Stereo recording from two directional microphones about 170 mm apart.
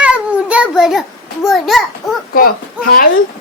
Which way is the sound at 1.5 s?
Centre (ahead or behind).